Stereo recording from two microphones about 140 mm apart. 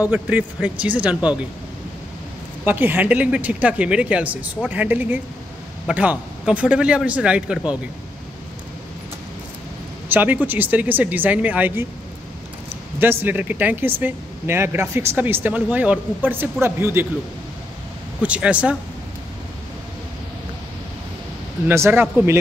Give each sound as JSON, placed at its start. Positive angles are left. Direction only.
{"t": 0.1, "sound": "speech", "side_deg": -10}
{"t": 2.6, "sound": "speech", "side_deg": -15}
{"t": 10.0, "sound": "speech", "side_deg": -15}
{"t": 13.0, "sound": "speech", "side_deg": -15}
{"t": 18.2, "sound": "speech", "side_deg": -10}
{"t": 21.6, "sound": "speech", "side_deg": -15}